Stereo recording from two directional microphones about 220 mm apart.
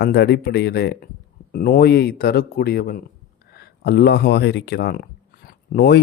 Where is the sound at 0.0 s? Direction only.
50° left (ahead or behind).